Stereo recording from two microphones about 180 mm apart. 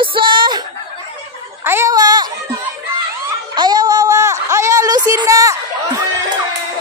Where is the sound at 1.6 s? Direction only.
15° right (ahead or behind).